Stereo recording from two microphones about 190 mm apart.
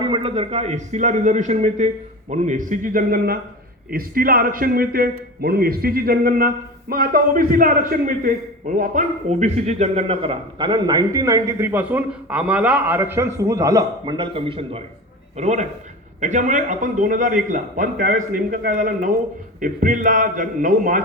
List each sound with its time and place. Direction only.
0.0 s a man's voice: 30° right (ahead or behind); by 21.0 s 45° right (ahead or behind)